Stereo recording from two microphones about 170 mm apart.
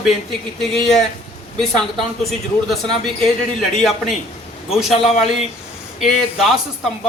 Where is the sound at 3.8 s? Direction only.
Centre (ahead or behind).